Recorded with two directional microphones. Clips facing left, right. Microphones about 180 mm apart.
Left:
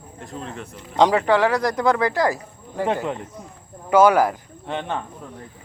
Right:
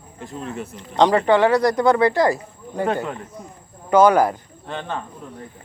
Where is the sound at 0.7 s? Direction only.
10° left (ahead or behind).